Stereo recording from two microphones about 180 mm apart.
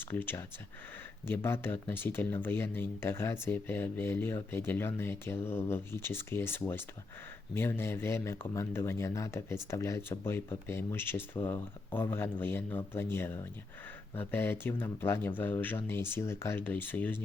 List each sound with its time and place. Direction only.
0.0 s speech: 10° left (ahead or behind)